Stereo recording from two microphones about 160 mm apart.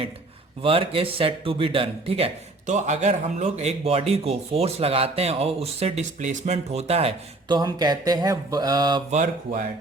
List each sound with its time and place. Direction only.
0.6 s a man's voice: 35° right (ahead or behind)
9.0 s speech: 55° right (ahead or behind)